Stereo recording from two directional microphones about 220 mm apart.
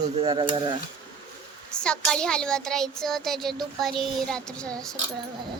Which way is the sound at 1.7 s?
5° left (ahead or behind).